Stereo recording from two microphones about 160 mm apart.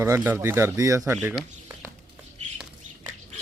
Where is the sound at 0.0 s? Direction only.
15° right (ahead or behind).